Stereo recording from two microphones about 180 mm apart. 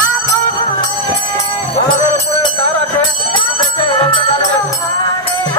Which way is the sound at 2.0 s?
30° left (ahead or behind).